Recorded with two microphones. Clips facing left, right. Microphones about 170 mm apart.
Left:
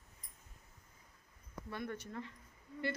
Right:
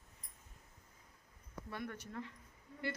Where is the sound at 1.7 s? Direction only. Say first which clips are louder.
Left 2 dB; 10° right (ahead or behind).